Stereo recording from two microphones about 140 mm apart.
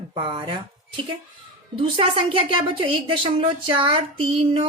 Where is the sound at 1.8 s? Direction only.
40° right (ahead or behind).